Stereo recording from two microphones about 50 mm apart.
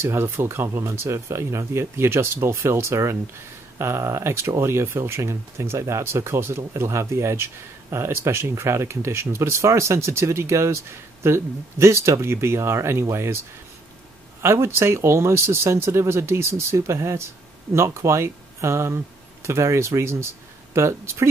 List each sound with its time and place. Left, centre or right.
0.0 s speech: right
14.4 s speech: right